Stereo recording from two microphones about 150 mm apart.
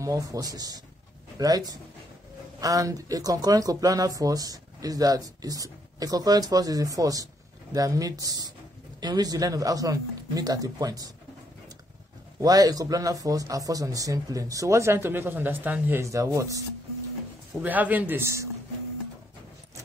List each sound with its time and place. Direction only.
0.0 s speech: 20° right (ahead or behind)
12.4 s speech: 25° right (ahead or behind)
17.6 s a man's voice: 10° right (ahead or behind)